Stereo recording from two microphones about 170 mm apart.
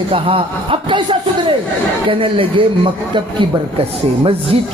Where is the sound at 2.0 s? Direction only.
30° right (ahead or behind).